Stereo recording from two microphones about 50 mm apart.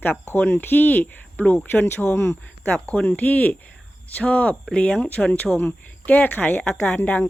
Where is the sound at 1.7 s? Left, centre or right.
Left.